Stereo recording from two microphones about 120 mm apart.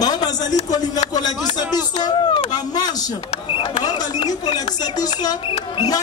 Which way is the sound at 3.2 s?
55° left (ahead or behind).